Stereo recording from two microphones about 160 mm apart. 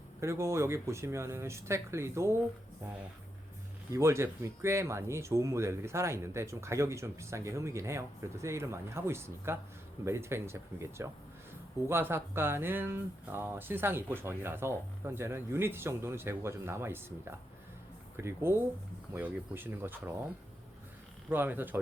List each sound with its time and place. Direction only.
0.2 s speech: 15° right (ahead or behind)
3.9 s speech: 15° right (ahead or behind)
21.2 s speech: 10° right (ahead or behind)